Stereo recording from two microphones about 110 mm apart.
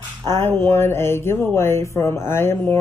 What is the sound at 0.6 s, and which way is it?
Speech, 25° left (ahead or behind).